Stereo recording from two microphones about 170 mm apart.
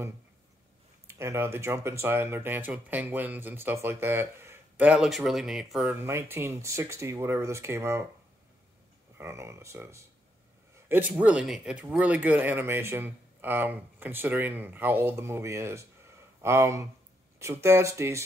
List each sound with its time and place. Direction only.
1.0 s speech: 15° right (ahead or behind)
6.0 s speech: 15° right (ahead or behind)
9.2 s speech: 15° right (ahead or behind)